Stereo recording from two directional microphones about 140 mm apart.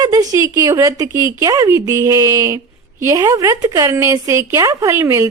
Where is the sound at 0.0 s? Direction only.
25° right (ahead or behind).